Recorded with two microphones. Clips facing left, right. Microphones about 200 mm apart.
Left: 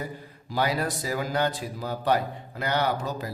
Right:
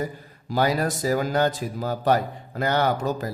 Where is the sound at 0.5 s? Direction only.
45° right (ahead or behind).